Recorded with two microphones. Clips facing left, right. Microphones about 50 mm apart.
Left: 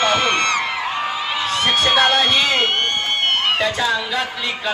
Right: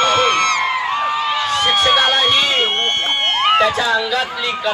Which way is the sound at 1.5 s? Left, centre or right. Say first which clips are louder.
Right 1 dB; centre.